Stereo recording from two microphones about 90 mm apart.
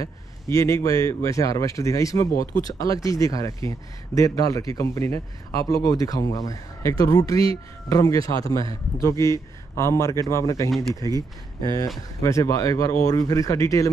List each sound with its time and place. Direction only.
0.0 s a man's voice: 35° left (ahead or behind)
11.1 s speech: 45° right (ahead or behind)
12.2 s a man's voice: 35° left (ahead or behind)